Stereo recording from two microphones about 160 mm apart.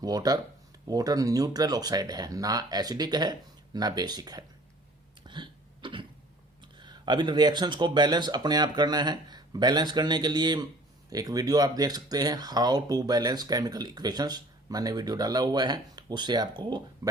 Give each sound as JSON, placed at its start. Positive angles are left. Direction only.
{"t": 0.0, "sound": "speech", "side_deg": -25}
{"t": 5.2, "sound": "cough", "side_deg": -30}
{"t": 6.7, "sound": "speech", "side_deg": -30}